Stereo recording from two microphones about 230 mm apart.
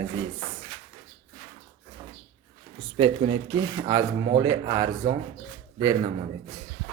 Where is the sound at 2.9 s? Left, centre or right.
Right.